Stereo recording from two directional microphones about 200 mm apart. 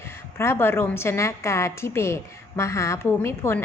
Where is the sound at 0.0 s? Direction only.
10° left (ahead or behind).